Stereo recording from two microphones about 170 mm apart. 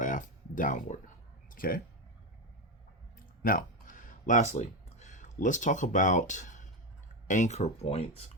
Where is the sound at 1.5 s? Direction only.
55° left (ahead or behind).